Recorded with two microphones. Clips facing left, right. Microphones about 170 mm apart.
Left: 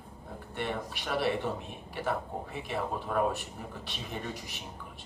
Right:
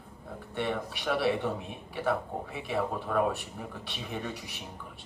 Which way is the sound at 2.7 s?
65° right (ahead or behind).